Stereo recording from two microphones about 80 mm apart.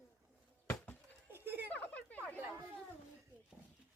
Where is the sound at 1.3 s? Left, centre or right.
Right.